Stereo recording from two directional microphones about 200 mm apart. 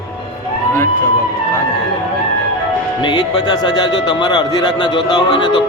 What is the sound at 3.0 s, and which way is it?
A man's voice, 25° left (ahead or behind).